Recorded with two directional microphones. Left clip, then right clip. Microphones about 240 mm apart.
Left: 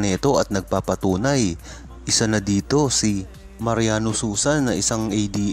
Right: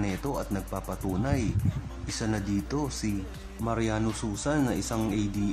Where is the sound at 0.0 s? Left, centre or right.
Left.